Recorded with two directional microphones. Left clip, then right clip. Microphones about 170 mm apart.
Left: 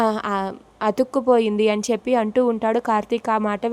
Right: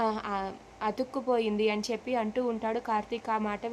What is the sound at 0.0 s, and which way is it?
A woman's voice, 45° left (ahead or behind).